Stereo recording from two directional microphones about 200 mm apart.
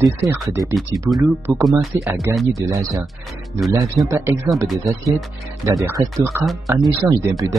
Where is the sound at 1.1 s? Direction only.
10° right (ahead or behind).